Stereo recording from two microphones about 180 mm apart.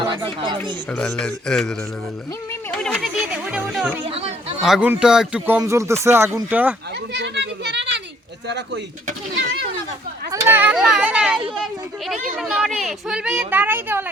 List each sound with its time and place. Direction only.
0.0 s speech: 25° right (ahead or behind)
0.6 s speech: 5° left (ahead or behind)
2.5 s a sound: 10° left (ahead or behind); by 3.6 s 5° right (ahead or behind)
3.6 s speech: centre (ahead or behind)
4.1 s chatter: 35° right (ahead or behind)
4.6 s speech: 5° right (ahead or behind)
7.1 s children playing: 75° right (ahead or behind)
8.4 s speech: 70° right (ahead or behind)
10.4 s speech: 10° right (ahead or behind)